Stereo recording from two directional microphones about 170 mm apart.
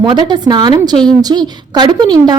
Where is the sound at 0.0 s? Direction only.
25° right (ahead or behind).